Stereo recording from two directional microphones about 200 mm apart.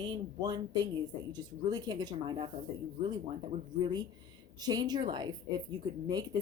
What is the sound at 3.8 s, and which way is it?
Speech, 20° right (ahead or behind).